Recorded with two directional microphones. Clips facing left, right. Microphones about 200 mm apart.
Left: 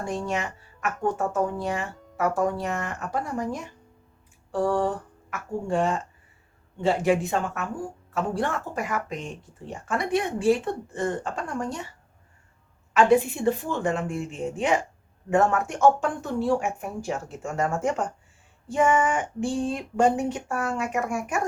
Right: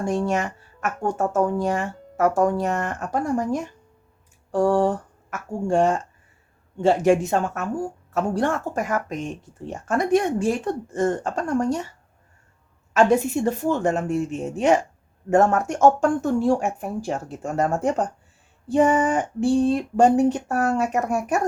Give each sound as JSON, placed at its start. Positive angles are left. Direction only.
{"t": 0.1, "sound": "speech", "side_deg": -45}
{"t": 12.9, "sound": "speech", "side_deg": -45}